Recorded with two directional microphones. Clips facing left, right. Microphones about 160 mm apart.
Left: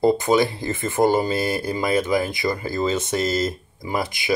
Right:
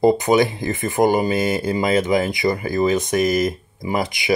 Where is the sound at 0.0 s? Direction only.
15° right (ahead or behind).